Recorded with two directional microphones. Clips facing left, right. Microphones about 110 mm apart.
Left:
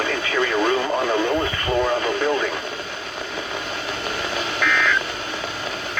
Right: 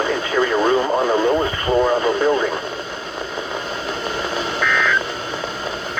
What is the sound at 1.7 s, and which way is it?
Radio, 20° right (ahead or behind).